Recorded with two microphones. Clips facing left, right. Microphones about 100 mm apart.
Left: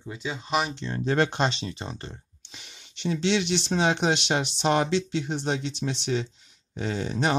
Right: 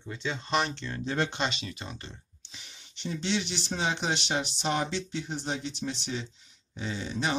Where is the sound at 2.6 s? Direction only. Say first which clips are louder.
Left 6 dB; 90° left.